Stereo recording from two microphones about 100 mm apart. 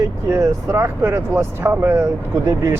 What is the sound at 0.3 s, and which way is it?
Speech, 25° right (ahead or behind).